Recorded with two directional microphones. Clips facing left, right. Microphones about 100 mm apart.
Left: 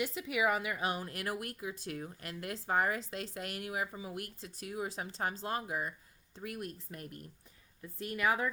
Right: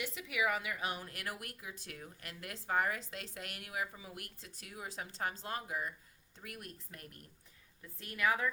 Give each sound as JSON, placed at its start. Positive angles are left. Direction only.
{"t": 0.0, "sound": "a woman's voice", "side_deg": 35}
{"t": 8.0, "sound": "a woman's voice", "side_deg": 25}